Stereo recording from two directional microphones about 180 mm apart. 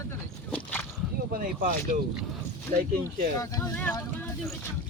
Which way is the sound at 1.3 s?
50° right (ahead or behind).